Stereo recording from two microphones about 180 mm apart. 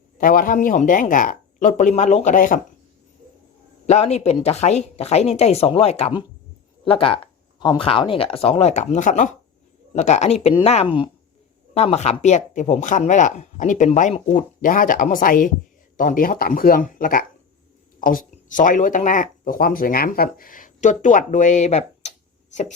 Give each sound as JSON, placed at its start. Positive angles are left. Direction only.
{"t": 0.2, "sound": "speech", "side_deg": 50}
{"t": 3.8, "sound": "speech", "side_deg": 35}